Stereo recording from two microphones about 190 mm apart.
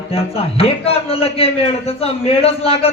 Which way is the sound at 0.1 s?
30° left (ahead or behind).